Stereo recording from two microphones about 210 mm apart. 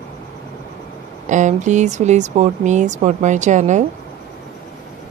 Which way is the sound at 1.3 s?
35° right (ahead or behind).